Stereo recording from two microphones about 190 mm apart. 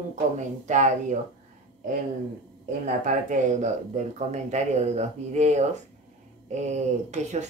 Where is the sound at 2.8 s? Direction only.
40° right (ahead or behind).